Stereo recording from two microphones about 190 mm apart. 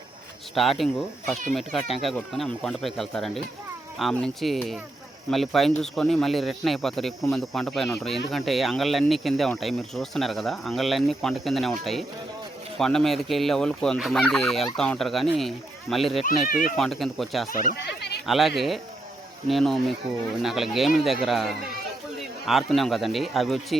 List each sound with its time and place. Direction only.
0.5 s speech: centre (ahead or behind)
12.8 s speech: centre (ahead or behind)
17.5 s speech: 55° left (ahead or behind)
18.3 s speech: centre (ahead or behind)